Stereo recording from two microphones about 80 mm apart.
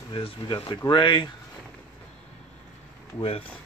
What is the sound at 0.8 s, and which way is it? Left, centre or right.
Speech, left.